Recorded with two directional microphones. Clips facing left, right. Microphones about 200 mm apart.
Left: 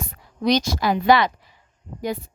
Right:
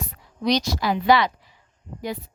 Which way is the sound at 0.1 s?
50° left (ahead or behind).